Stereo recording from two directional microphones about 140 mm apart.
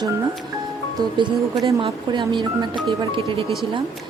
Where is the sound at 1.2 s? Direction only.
25° right (ahead or behind).